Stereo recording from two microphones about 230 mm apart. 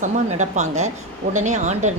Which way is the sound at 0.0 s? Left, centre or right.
Right.